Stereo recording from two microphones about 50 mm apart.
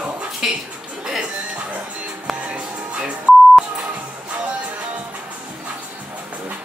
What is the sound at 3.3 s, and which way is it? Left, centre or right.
Beep, right.